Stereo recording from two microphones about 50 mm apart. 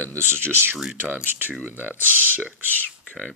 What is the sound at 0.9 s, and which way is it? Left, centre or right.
Speech, right.